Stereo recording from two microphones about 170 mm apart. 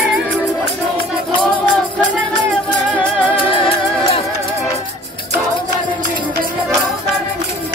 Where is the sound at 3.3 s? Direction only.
30° left (ahead or behind).